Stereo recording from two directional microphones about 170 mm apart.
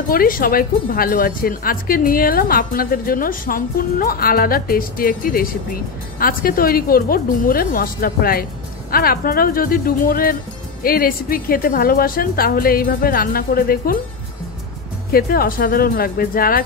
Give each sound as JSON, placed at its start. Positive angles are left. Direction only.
{"t": 0.1, "sound": "speech", "side_deg": 60}
{"t": 15.1, "sound": "speech", "side_deg": 60}